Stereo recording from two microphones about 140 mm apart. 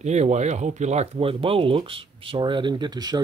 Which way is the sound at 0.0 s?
55° right (ahead or behind).